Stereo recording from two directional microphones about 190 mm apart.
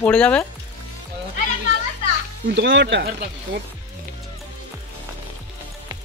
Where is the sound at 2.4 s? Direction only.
65° right (ahead or behind).